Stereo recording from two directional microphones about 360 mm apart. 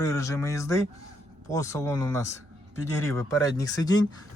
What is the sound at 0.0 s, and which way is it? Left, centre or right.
Speech, centre.